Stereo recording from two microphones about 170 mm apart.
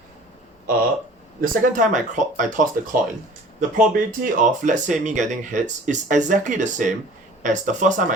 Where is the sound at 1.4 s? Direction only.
50° right (ahead or behind).